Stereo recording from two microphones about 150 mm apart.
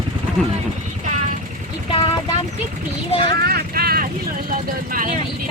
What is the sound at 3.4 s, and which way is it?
Vehicle, 90° right.